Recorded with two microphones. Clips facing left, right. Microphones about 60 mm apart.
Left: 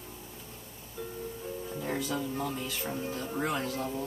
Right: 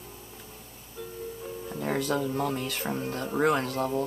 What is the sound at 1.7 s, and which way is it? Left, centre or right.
Speech, right.